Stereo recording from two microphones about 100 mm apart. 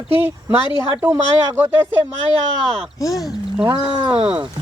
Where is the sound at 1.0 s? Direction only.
25° right (ahead or behind).